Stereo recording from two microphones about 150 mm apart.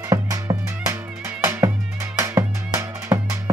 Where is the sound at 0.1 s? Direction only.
20° right (ahead or behind).